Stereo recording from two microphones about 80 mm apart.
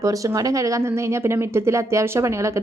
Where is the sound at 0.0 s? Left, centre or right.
Right.